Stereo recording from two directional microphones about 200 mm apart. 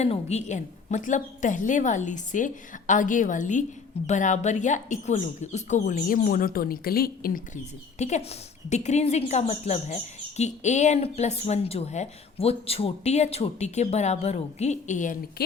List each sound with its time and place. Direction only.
0.0 s speech: 35° left (ahead or behind)